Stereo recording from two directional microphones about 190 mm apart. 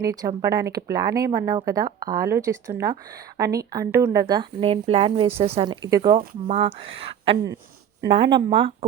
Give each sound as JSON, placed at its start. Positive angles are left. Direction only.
{"t": 0.0, "sound": "a woman's voice", "side_deg": -20}